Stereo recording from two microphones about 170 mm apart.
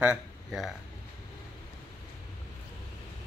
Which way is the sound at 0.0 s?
5° right (ahead or behind).